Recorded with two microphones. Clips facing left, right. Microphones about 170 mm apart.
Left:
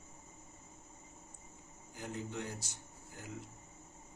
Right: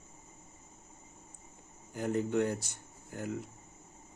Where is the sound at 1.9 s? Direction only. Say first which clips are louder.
Right 12 dB; 55° right (ahead or behind).